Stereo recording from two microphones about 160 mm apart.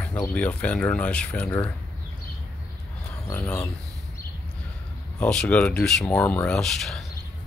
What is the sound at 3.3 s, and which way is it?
Speech, 10° left (ahead or behind).